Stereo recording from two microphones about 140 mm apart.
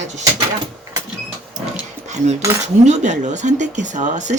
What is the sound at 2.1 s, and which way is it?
Cutlery, 55° right (ahead or behind).